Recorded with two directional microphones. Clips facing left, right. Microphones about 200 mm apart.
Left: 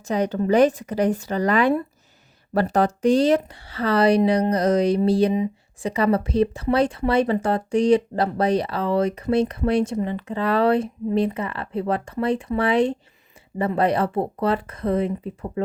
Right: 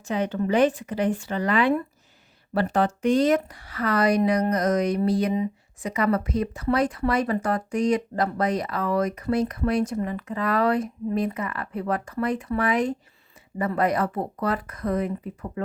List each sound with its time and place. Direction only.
0.1 s speech: 40° left (ahead or behind)